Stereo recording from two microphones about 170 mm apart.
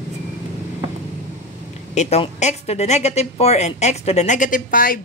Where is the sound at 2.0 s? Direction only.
40° left (ahead or behind).